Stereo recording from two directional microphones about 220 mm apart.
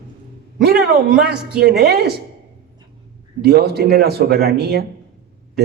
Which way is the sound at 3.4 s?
45° right (ahead or behind).